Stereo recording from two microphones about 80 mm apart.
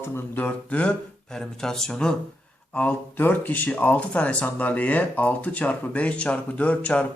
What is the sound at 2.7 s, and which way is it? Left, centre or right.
Speech, left.